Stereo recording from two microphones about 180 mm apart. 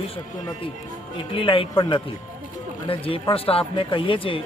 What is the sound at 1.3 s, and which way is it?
Speech, 30° left (ahead or behind).